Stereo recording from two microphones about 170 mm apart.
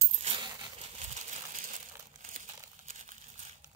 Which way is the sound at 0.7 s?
40° right (ahead or behind).